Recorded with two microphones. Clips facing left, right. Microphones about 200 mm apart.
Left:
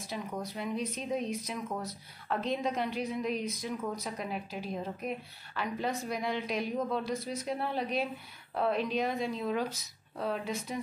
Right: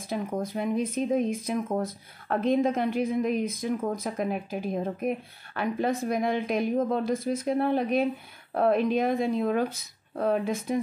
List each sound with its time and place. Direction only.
0.0 s speech: 50° right (ahead or behind)